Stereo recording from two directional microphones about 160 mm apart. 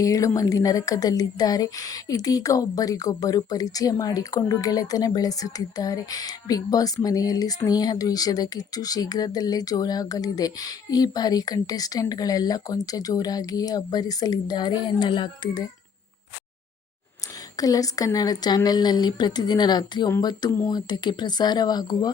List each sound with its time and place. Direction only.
0.0 s a woman's voice: 20° left (ahead or behind)
17.6 s a woman's voice: 20° left (ahead or behind)